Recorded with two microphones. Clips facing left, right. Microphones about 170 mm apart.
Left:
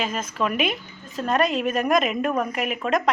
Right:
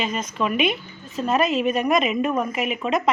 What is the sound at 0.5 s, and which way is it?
Speech, 40° left (ahead or behind).